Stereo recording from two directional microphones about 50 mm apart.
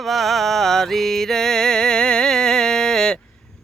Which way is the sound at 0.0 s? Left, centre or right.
Centre.